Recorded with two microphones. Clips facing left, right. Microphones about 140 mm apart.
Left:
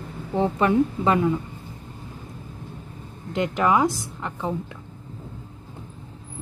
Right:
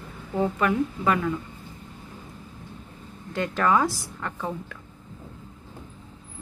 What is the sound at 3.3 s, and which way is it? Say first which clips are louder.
A woman's voice: left 2 dB; 20° left (ahead or behind).